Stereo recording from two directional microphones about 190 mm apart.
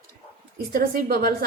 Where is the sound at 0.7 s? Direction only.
50° right (ahead or behind).